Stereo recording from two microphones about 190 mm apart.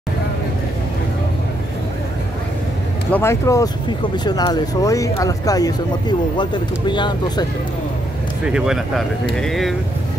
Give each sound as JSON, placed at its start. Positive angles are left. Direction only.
{"t": 3.1, "sound": "speech", "side_deg": 15}
{"t": 8.5, "sound": "speech", "side_deg": -5}